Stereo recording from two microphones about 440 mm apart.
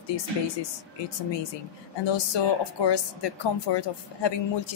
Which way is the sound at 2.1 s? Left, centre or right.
Left.